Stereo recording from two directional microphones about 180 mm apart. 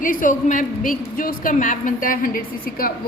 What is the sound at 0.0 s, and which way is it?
A woman's voice, 50° left (ahead or behind).